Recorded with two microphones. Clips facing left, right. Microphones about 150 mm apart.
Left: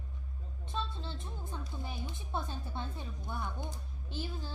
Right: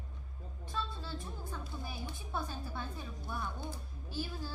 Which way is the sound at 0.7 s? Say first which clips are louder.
Left 1 dB; 20° left (ahead or behind).